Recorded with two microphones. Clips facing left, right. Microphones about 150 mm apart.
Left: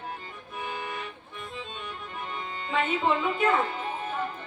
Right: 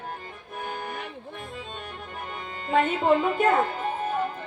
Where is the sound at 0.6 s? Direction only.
45° right (ahead or behind).